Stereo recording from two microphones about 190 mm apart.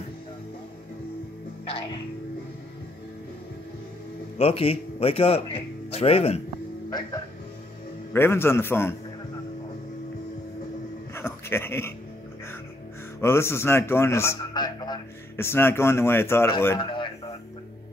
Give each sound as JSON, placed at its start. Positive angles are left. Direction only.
{"t": 4.4, "sound": "a man's voice", "side_deg": 30}
{"t": 11.1, "sound": "speech", "side_deg": 15}
{"t": 13.2, "sound": "a man's voice", "side_deg": 15}